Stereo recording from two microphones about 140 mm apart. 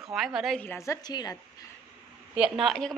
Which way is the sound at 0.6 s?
15° left (ahead or behind).